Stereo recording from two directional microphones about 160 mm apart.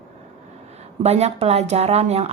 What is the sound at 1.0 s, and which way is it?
Speech, 40° right (ahead or behind).